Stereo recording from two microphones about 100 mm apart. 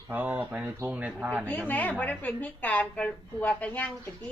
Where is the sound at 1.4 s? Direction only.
15° left (ahead or behind).